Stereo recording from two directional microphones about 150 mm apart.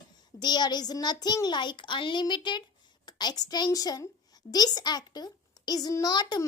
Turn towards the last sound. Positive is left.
turn(degrees=30)  # may be behind; listen again after turning